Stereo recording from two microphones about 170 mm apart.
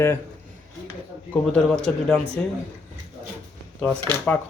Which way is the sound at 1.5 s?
5° left (ahead or behind).